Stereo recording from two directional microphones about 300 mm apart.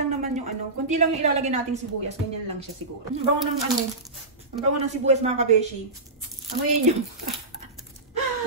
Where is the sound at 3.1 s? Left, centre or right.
Right.